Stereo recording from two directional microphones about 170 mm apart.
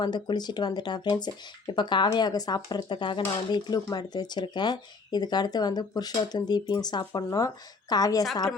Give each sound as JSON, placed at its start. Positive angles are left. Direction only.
{"t": 0.0, "sound": "speech", "side_deg": 25}